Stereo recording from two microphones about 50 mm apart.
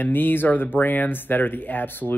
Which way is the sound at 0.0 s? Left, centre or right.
Left.